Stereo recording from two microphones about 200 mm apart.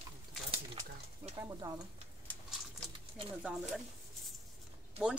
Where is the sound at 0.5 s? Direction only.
25° right (ahead or behind).